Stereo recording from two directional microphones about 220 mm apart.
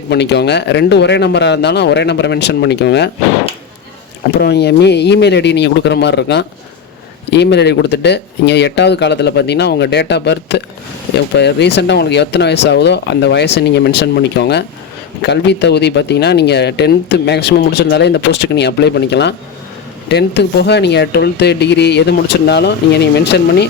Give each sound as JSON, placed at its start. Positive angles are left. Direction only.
{"t": 0.1, "sound": "speech", "side_deg": 50}
{"t": 4.4, "sound": "speech", "side_deg": 50}